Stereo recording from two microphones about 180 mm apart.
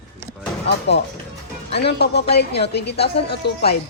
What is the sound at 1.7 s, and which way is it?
A woman's voice, 65° left (ahead or behind).